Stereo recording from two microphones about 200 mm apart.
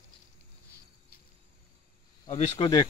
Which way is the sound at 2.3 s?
35° left (ahead or behind).